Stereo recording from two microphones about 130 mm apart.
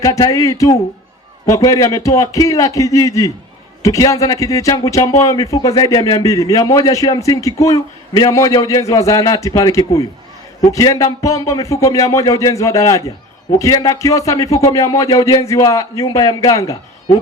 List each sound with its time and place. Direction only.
0.0 s speech: 25° left (ahead or behind)